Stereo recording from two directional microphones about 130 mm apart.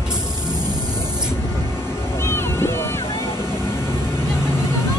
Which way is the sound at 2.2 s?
20° left (ahead or behind).